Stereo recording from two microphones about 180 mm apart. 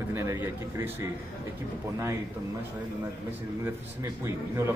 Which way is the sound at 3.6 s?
15° right (ahead or behind).